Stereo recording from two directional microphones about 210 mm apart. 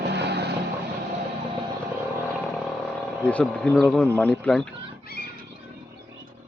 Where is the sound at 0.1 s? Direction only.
55° right (ahead or behind).